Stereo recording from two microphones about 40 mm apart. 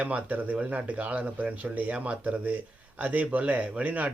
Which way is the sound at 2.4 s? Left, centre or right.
Right.